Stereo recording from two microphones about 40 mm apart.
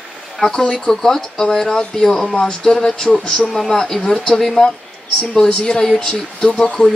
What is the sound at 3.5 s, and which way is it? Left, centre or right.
Speech, centre.